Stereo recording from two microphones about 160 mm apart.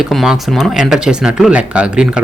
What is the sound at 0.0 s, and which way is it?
A man's voice, centre (ahead or behind).